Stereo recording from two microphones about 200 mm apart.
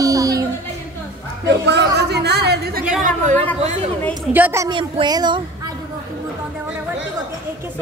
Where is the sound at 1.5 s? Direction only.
55° right (ahead or behind).